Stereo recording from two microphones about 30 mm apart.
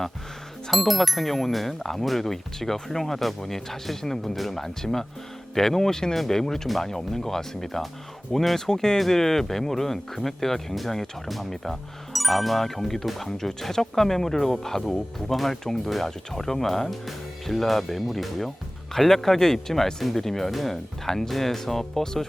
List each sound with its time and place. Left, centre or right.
0.7 s speech: centre
11.3 s speech: centre